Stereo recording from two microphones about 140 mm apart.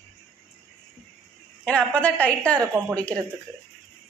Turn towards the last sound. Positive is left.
turn(degrees=10)  # may be behind; listen again after turning